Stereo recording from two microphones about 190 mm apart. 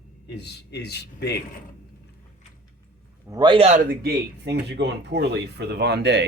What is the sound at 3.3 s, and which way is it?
Speech, 25° right (ahead or behind).